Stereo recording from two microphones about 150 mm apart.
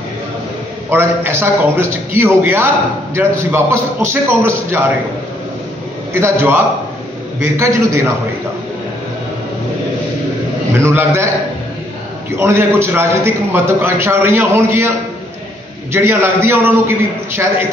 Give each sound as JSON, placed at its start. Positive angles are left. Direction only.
{"t": 0.8, "sound": "a man's voice", "side_deg": -15}
{"t": 6.1, "sound": "a man's voice", "side_deg": -15}
{"t": 10.8, "sound": "a man's voice", "side_deg": -15}
{"t": 12.4, "sound": "a man's voice", "side_deg": -15}
{"t": 15.9, "sound": "a man's voice", "side_deg": -15}